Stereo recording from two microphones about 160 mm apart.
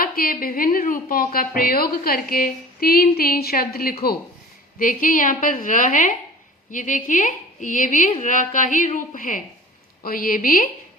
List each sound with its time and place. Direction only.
0.0 s a woman's voice: 65° left (ahead or behind)
4.8 s a woman's voice: 60° left (ahead or behind)